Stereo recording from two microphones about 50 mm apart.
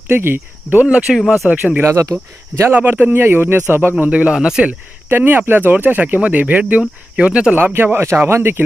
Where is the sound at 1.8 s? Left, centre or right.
Right.